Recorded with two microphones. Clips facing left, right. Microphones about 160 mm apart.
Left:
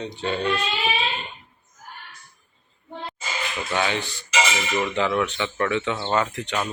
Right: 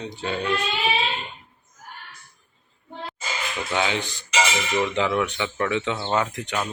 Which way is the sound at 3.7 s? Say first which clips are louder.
Even; 15° right (ahead or behind).